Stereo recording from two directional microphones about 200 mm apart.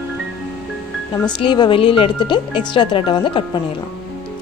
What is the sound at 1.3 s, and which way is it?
Speech, 20° left (ahead or behind).